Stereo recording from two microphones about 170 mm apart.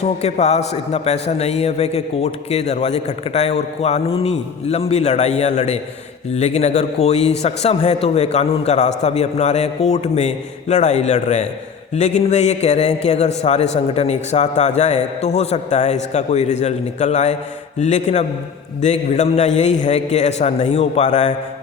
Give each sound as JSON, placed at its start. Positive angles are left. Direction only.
{"t": 0.0, "sound": "a man's voice", "side_deg": 40}